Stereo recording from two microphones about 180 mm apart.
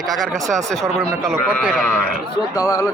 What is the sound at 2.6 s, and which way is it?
Speech, 20° left (ahead or behind).